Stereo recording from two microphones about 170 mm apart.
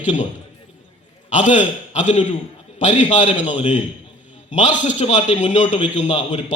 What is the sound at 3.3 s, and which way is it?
Speech, 10° right (ahead or behind).